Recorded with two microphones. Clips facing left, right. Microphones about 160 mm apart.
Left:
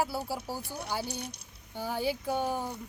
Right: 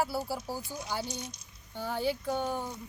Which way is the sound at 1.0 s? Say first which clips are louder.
Left 1 dB; 60° left (ahead or behind).